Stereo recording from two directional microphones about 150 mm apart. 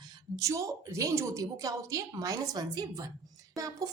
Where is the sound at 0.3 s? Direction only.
20° right (ahead or behind).